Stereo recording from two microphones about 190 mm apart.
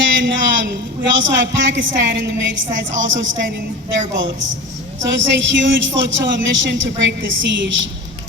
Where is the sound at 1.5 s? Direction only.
75° right (ahead or behind).